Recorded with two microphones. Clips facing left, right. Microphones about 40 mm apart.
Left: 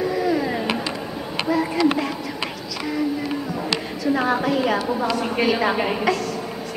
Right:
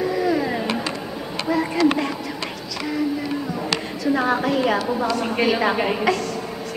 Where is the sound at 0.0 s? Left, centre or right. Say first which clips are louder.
Even; centre.